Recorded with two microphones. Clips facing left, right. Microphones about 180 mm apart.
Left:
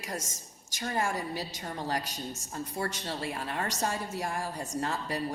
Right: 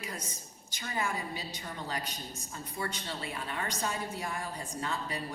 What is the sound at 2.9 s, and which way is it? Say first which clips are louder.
A woman's voice: left 4 dB; 45° left (ahead or behind).